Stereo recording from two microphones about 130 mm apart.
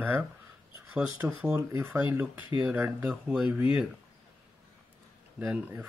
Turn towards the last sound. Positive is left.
turn(degrees=-15)  # may be behind; listen again after turning